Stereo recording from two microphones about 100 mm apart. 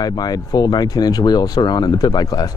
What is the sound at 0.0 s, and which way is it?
Speech, 40° left (ahead or behind).